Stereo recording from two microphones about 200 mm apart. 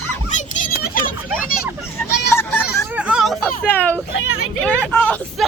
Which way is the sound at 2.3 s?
10° left (ahead or behind).